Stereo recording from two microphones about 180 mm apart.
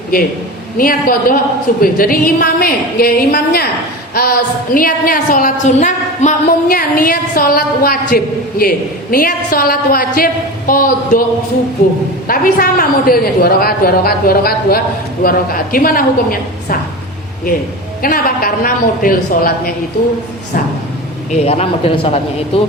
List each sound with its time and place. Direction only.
0.1 s a woman's voice: 55° left (ahead or behind)
12.3 s a woman's voice: 55° left (ahead or behind)
18.0 s a woman's voice: 55° left (ahead or behind)
21.3 s a man's voice: 35° left (ahead or behind)